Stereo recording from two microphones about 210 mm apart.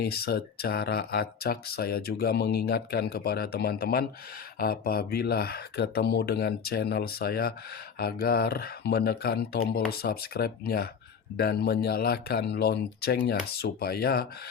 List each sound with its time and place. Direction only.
0.0 s speech: 50° left (ahead or behind)